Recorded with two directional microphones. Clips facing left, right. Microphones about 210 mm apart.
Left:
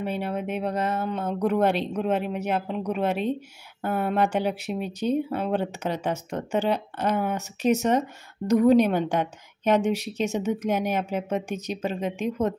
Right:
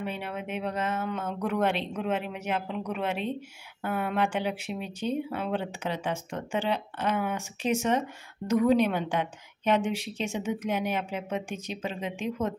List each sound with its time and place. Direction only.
0.0 s a woman's voice: 40° left (ahead or behind)